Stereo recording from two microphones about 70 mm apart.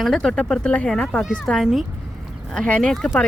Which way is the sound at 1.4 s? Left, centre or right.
Centre.